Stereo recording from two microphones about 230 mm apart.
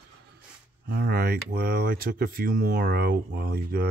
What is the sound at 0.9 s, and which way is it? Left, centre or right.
Speech, right.